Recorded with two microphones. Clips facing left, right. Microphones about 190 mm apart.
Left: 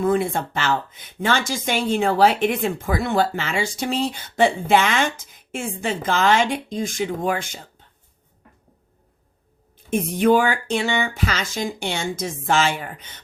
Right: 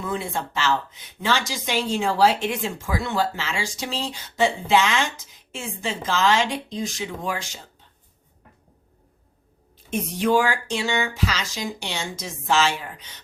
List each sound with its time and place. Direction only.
0.0 s speech: 50° left (ahead or behind)
9.9 s speech: 55° left (ahead or behind)